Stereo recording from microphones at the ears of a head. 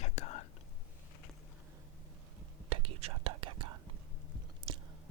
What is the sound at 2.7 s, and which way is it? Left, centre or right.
Whispering, right.